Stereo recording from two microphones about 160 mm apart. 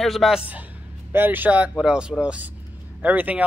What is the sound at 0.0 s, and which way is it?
Speech, centre (ahead or behind).